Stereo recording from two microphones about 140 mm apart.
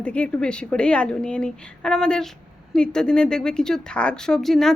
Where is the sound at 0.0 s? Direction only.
10° left (ahead or behind).